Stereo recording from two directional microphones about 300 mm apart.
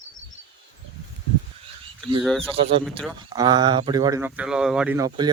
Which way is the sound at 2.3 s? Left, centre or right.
Centre.